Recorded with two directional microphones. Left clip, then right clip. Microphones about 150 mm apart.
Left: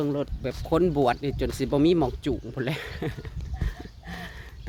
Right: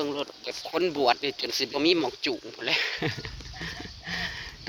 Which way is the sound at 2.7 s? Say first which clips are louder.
Right 11 dB; 15° left (ahead or behind).